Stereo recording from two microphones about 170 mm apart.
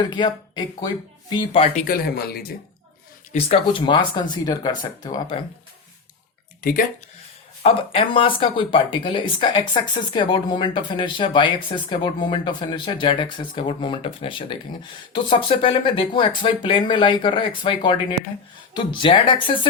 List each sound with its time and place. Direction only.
0.0 s speech: 25° left (ahead or behind)
1.8 s speech: 60° left (ahead or behind)
3.3 s speech: 30° left (ahead or behind)
6.6 s speech: 60° left (ahead or behind)
7.6 s speech: 30° left (ahead or behind)